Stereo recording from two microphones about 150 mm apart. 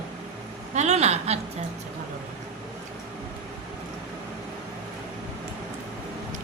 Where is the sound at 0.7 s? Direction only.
50° right (ahead or behind).